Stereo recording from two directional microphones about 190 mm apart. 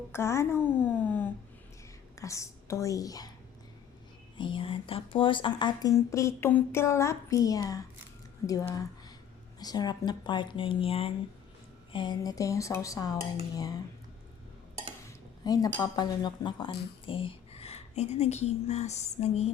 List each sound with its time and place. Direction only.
0.1 s a woman's voice: 15° left (ahead or behind)
4.4 s speech: 25° left (ahead or behind)
15.0 s a woman's voice: 20° left (ahead or behind); by 19.5 s 35° left (ahead or behind)